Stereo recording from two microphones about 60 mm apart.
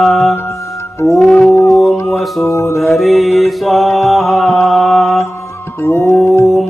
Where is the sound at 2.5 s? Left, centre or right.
Left.